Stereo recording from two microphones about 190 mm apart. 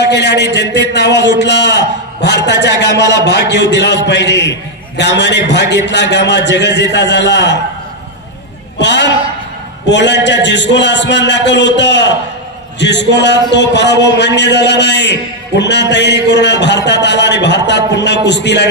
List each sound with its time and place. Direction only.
0.0 s a man's voice: 65° left (ahead or behind)
8.7 s a man's voice: 70° left (ahead or behind)